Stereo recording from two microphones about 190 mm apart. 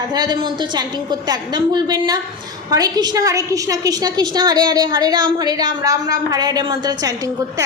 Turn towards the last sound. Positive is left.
turn(degrees=-20)  # may be behind; listen again after turning